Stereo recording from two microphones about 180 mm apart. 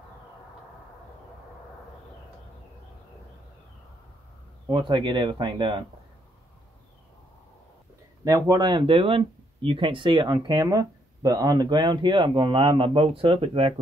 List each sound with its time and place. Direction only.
4.6 s speech: 25° right (ahead or behind)
8.2 s speech: 20° right (ahead or behind)